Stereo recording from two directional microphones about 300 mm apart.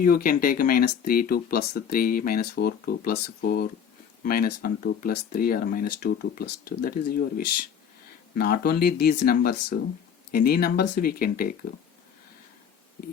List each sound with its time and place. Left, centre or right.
0.0 s speech: left